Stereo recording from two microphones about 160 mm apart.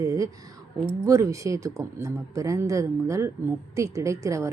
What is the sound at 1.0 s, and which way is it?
A woman's voice, 20° right (ahead or behind).